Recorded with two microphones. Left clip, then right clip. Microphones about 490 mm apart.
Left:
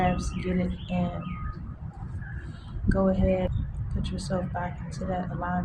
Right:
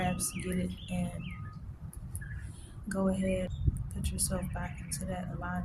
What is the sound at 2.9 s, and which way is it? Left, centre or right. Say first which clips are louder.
Speech: left 7 dB; right.